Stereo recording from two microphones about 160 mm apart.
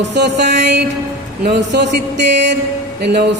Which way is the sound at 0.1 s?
90° right.